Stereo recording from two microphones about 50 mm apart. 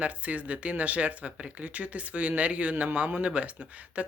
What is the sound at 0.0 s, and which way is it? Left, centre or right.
Speech, right.